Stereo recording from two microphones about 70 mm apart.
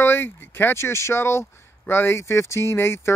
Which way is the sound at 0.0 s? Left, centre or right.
Left.